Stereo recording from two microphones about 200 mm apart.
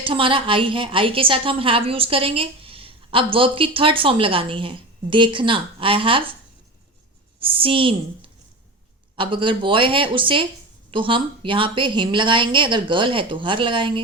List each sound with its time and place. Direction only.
0.0 s a woman's voice: 25° right (ahead or behind)
7.4 s a woman's voice: 25° right (ahead or behind)